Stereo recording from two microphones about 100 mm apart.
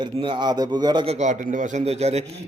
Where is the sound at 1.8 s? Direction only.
90° right.